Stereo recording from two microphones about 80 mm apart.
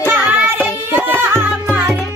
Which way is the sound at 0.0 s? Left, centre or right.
Right.